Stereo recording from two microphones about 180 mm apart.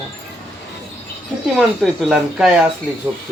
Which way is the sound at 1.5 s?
Centre (ahead or behind).